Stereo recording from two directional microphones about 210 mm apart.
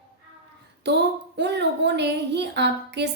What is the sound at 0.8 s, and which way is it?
Speech, 55° right (ahead or behind).